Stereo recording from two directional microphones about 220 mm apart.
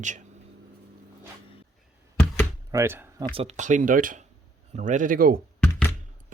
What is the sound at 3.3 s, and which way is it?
Speech, 30° right (ahead or behind).